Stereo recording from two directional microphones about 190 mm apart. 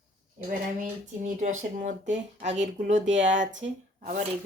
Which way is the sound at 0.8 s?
40° right (ahead or behind).